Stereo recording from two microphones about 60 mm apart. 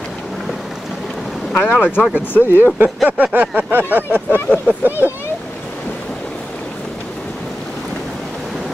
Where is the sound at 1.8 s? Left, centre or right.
Centre.